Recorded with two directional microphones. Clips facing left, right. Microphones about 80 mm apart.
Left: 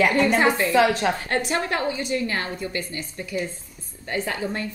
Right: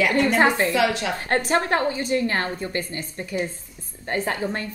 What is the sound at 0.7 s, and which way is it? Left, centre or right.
Speech, left.